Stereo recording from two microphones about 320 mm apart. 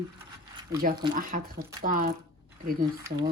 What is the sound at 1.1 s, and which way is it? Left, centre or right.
Speech, right.